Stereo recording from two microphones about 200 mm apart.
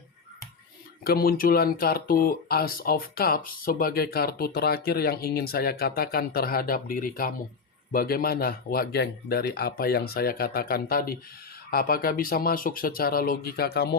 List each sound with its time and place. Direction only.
1.0 s speech: 50° left (ahead or behind)